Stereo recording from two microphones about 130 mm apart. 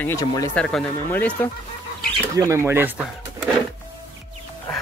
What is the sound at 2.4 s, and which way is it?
Speech, 20° right (ahead or behind).